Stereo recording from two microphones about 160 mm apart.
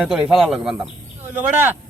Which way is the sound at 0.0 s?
5° right (ahead or behind).